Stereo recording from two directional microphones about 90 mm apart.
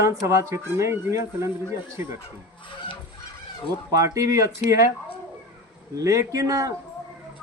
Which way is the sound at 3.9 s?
35° right (ahead or behind).